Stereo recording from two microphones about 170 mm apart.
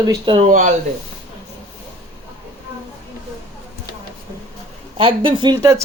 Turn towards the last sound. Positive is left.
turn(degrees=-20)  # may be behind; listen again after turning